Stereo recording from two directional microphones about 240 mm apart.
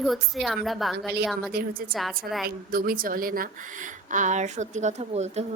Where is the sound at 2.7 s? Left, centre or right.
Right.